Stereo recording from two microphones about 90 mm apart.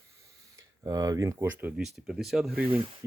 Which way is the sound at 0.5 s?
40° right (ahead or behind).